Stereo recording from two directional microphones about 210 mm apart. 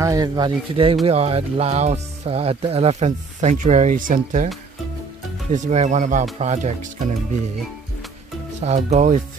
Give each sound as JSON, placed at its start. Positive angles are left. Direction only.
{"t": 0.0, "sound": "speech", "side_deg": -15}
{"t": 5.5, "sound": "speech", "side_deg": -35}
{"t": 8.5, "sound": "speech", "side_deg": -30}